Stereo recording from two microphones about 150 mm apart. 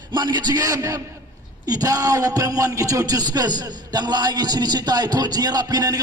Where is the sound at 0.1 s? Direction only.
30° right (ahead or behind).